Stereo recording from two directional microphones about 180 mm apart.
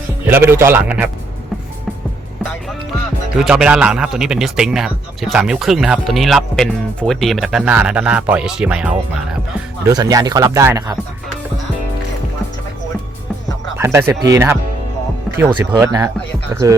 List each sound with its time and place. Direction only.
0.3 s a man's voice: 10° right (ahead or behind)
3.3 s speech: 5° right (ahead or behind)
9.8 s speech: 20° right (ahead or behind)
13.7 s a man's voice: 15° right (ahead or behind)